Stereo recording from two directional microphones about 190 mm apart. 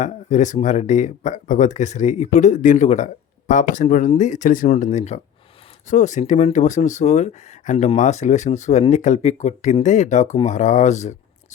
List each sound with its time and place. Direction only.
0.0 s speech: 40° left (ahead or behind)